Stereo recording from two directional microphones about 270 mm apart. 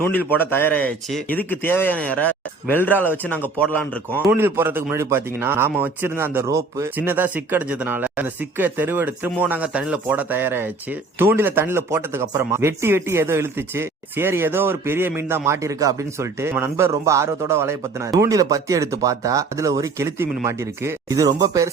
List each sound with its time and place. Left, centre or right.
0.0 s speech: centre
4.3 s speech: centre